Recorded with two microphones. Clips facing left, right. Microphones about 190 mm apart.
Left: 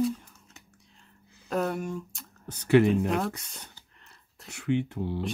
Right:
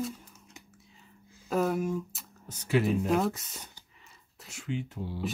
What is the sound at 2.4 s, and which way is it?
Speech, 65° left (ahead or behind).